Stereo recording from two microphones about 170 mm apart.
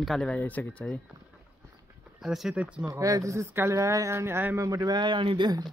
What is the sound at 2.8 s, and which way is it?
Speech, 20° right (ahead or behind).